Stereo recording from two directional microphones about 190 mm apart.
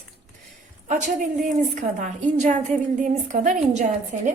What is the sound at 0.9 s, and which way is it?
A woman's voice, 40° right (ahead or behind).